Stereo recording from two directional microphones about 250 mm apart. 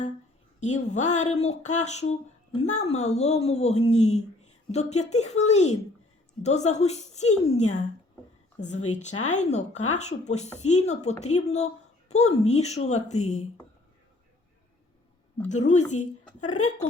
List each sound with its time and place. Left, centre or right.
0.6 s speech: left
15.4 s speech: left